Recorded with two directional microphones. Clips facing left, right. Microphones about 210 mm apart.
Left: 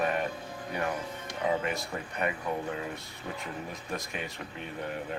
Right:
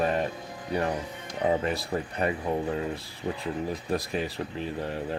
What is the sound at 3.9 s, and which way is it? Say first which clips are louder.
Speech: right 7 dB; 35° right (ahead or behind).